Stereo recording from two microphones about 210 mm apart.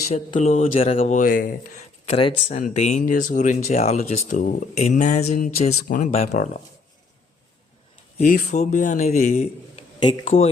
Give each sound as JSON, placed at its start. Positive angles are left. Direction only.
{"t": 0.1, "sound": "speech", "side_deg": 30}
{"t": 2.0, "sound": "speech", "side_deg": 30}
{"t": 8.2, "sound": "speech", "side_deg": 35}